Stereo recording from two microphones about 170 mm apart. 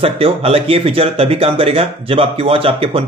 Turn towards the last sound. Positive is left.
turn(degrees=-35)  # may be behind; listen again after turning